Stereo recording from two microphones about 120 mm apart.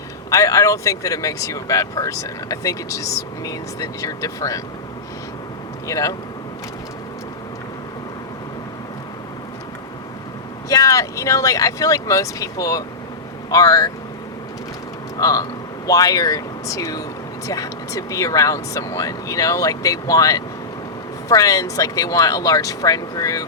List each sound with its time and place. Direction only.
0.3 s speech: 25° left (ahead or behind)
5.9 s speech: 25° left (ahead or behind)
10.7 s speech: 30° left (ahead or behind)
15.2 s speech: 30° left (ahead or behind)